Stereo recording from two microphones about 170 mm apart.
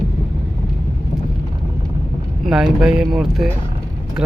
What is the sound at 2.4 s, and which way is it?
Speech, centre (ahead or behind).